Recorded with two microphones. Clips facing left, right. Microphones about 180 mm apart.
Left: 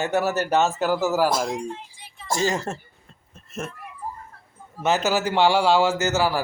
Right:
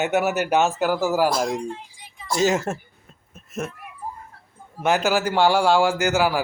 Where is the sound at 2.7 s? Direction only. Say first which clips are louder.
Right 3 dB; 15° right (ahead or behind).